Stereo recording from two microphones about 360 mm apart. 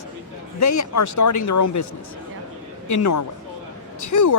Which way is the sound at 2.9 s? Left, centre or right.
Left.